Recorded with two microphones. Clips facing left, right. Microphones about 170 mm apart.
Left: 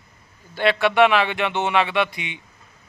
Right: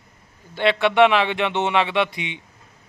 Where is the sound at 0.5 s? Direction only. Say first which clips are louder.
Right 1 dB; 20° right (ahead or behind).